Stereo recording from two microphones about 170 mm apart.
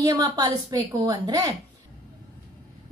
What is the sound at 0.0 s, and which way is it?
A woman's voice, 25° right (ahead or behind).